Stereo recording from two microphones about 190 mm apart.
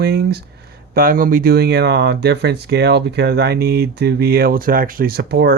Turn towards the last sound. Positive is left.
turn(degrees=-55)  # may be behind; listen again after turning